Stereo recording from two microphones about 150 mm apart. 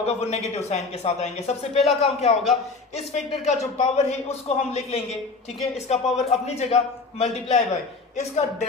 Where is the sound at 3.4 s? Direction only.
50° left (ahead or behind).